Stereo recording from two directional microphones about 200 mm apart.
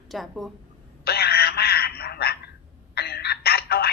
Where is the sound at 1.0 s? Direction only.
50° left (ahead or behind).